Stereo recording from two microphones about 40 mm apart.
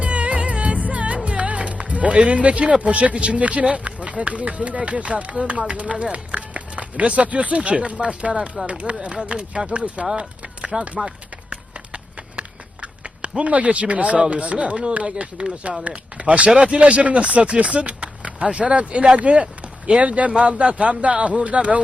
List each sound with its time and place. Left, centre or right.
0.0 s music: right
2.8 s speech: right
7.9 s speech: right
10.7 s speech: centre
12.4 s a sound: right
13.4 s speech: right